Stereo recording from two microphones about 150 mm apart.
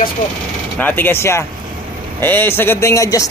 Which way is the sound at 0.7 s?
10° left (ahead or behind).